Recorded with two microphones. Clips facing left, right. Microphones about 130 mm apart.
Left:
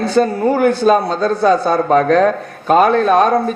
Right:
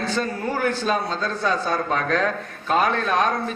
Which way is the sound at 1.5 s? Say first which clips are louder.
Left 10 dB; 35° left (ahead or behind).